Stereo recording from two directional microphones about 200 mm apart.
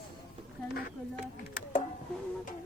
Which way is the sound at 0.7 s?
50° left (ahead or behind).